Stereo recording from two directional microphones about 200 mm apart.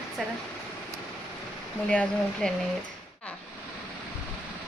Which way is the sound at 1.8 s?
5° left (ahead or behind).